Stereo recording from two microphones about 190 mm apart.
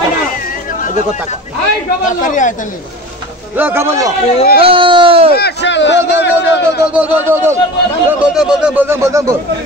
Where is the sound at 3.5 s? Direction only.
10° right (ahead or behind).